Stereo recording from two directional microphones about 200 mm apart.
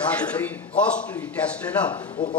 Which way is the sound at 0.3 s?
5° left (ahead or behind).